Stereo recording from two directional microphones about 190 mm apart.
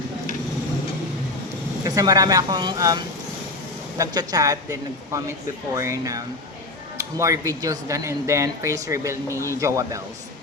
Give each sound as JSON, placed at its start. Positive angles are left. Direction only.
{"t": 1.8, "sound": "a woman's voice", "side_deg": -20}